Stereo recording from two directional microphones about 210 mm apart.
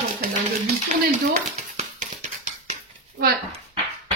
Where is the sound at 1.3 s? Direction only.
35° right (ahead or behind).